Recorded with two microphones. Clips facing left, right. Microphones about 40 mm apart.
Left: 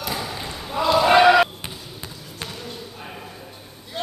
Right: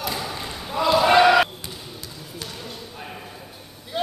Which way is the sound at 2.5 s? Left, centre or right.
Centre.